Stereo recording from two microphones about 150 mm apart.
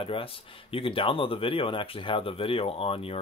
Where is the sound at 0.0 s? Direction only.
35° left (ahead or behind).